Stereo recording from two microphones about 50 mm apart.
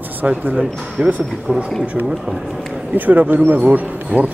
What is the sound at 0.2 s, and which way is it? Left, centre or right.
Speech, right.